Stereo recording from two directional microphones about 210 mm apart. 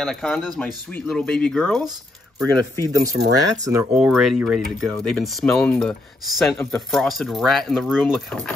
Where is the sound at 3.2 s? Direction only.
60° right (ahead or behind).